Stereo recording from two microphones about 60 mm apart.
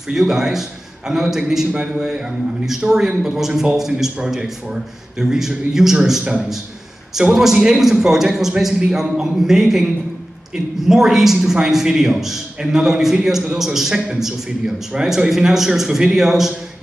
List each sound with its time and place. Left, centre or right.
0.1 s a man's voice: centre
1.7 s a man's voice: centre